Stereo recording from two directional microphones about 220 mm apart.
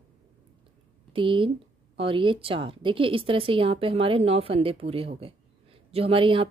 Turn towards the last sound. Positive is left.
turn(degrees=-25)  # may be behind; listen again after turning